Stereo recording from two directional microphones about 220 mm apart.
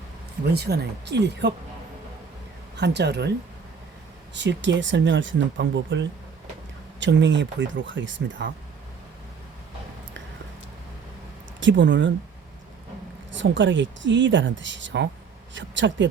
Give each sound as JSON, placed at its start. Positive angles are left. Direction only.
{"t": 0.4, "sound": "speech", "side_deg": -45}
{"t": 2.7, "sound": "speech", "side_deg": -50}
{"t": 4.4, "sound": "speech", "side_deg": -55}
{"t": 11.6, "sound": "speech", "side_deg": -55}
{"t": 13.3, "sound": "speech", "side_deg": -55}